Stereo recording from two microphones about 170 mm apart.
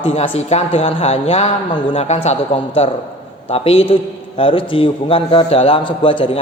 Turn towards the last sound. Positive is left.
turn(degrees=30)  # may be behind; listen again after turning